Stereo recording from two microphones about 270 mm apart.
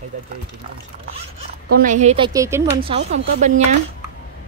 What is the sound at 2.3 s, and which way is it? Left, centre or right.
Speech, centre.